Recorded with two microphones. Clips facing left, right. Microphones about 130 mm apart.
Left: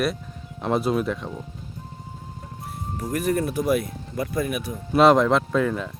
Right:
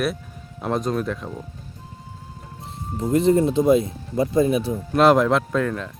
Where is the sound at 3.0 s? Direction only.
25° right (ahead or behind).